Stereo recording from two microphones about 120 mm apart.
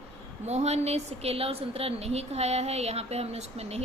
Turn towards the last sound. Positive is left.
turn(degrees=-60)  # may be behind; listen again after turning